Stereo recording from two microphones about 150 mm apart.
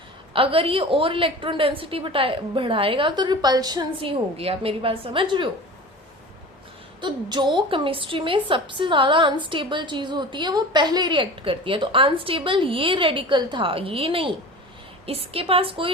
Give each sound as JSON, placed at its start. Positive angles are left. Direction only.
{"t": 0.3, "sound": "a woman's voice", "side_deg": -40}
{"t": 4.4, "sound": "a woman's voice", "side_deg": -40}
{"t": 7.0, "sound": "a woman's voice", "side_deg": -30}